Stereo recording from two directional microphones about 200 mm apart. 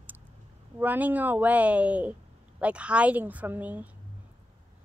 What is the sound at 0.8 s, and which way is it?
A woman's voice, 10° right (ahead or behind).